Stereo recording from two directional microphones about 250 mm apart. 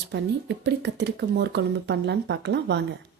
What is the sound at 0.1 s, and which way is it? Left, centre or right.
A woman's voice, right.